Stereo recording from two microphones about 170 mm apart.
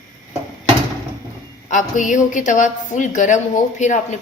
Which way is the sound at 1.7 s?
50° left (ahead or behind).